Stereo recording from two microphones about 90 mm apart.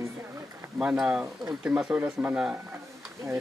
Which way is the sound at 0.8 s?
10° right (ahead or behind).